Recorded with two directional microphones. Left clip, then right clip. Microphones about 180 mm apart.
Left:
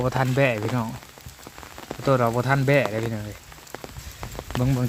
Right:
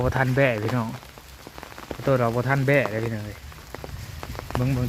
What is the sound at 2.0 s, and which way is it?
Speech, 15° left (ahead or behind).